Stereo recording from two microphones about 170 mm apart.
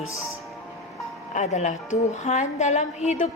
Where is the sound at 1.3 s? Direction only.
45° left (ahead or behind).